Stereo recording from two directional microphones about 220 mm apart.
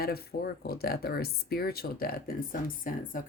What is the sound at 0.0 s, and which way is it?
Speech, 45° left (ahead or behind).